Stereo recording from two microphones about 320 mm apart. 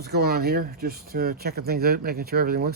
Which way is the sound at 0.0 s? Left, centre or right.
Right.